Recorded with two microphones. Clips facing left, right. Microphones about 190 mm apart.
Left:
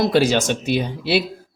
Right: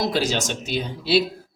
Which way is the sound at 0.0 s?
60° left (ahead or behind).